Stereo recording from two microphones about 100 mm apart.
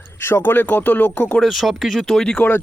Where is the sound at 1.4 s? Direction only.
Centre (ahead or behind).